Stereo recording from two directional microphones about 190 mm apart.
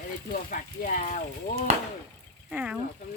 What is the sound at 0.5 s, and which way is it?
Speech, 45° left (ahead or behind).